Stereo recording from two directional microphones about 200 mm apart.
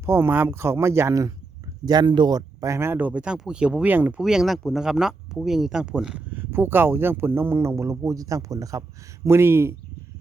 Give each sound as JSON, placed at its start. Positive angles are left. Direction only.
{"t": 0.0, "sound": "speech", "side_deg": -10}